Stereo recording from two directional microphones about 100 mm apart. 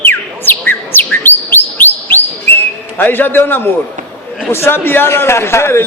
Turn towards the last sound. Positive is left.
turn(degrees=25)  # may be behind; listen again after turning